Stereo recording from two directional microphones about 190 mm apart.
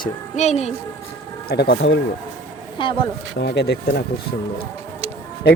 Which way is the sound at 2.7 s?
25° left (ahead or behind).